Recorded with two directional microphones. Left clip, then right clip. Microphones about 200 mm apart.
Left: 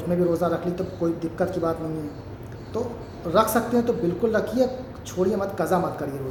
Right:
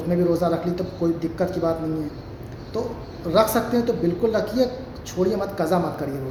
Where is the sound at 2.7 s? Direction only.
5° left (ahead or behind).